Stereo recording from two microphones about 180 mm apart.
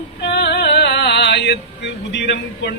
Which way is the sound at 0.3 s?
70° left (ahead or behind).